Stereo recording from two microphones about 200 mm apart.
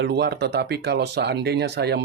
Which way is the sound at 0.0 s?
55° right (ahead or behind).